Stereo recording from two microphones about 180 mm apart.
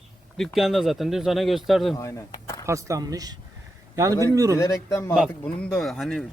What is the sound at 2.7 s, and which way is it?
Speech, 15° right (ahead or behind).